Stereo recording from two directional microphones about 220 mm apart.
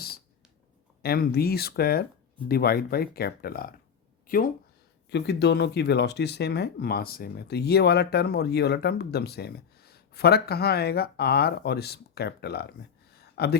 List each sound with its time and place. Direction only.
1.0 s speech: 45° left (ahead or behind)
5.0 s speech: 50° left (ahead or behind)
13.1 s a sound: 45° left (ahead or behind)